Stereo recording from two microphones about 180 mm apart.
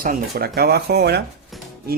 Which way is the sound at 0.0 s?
55° right (ahead or behind).